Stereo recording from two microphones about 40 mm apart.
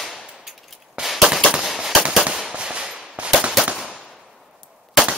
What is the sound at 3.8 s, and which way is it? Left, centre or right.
Gunshot, centre.